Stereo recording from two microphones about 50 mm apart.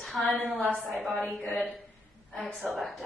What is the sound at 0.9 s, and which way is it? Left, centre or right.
Speech, centre.